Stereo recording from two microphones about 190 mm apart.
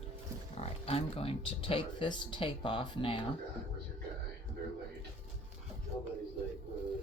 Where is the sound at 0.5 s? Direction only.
35° left (ahead or behind).